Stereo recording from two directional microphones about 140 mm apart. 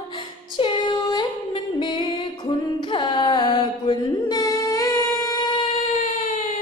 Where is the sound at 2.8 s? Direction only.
35° left (ahead or behind).